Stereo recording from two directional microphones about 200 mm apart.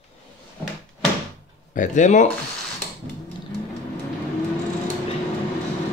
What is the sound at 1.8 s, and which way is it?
Speech, 40° left (ahead or behind).